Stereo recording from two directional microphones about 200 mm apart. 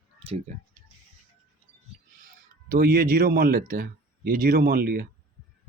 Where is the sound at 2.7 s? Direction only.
45° right (ahead or behind).